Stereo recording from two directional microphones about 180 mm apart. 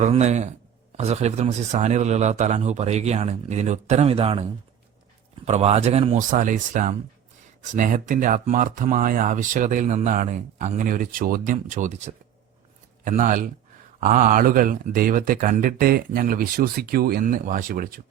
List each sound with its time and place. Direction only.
0.0 s a man's voice: 40° right (ahead or behind)
5.5 s a man's voice: 35° right (ahead or behind); by 18.0 s 50° right (ahead or behind)